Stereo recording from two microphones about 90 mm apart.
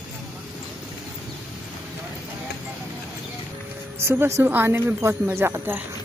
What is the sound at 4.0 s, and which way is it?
Speech, 30° right (ahead or behind).